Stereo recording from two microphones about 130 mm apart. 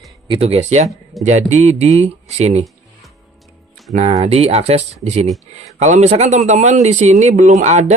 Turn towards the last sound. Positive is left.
turn(degrees=-65)  # may be behind; listen again after turning